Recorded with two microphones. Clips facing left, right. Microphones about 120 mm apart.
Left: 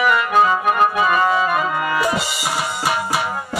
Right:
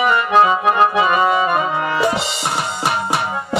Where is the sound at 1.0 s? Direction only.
25° right (ahead or behind).